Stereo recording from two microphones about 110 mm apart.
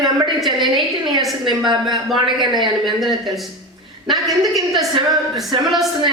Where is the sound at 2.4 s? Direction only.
Centre (ahead or behind).